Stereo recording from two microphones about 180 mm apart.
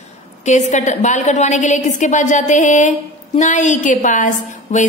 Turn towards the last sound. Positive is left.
turn(degrees=40)  # may be behind; listen again after turning